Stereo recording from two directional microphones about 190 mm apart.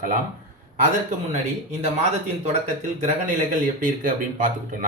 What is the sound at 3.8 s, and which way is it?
Speech, 45° right (ahead or behind).